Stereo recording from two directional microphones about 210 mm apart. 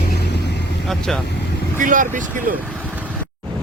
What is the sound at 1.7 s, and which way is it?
Speech, 40° right (ahead or behind).